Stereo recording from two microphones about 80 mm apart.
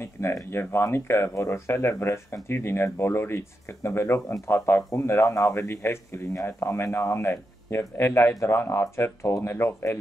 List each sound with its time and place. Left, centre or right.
0.0 s speech: left